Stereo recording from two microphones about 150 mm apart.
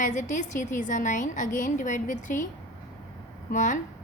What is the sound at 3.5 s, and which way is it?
Speech, 60° left (ahead or behind).